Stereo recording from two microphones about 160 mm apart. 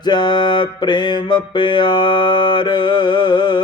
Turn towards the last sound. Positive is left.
turn(degrees=25)  # may be behind; listen again after turning